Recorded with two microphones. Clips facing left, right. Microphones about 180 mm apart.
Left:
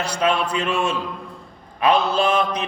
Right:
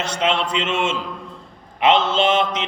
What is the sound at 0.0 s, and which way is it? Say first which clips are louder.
A man's voice: even; 20° right (ahead or behind).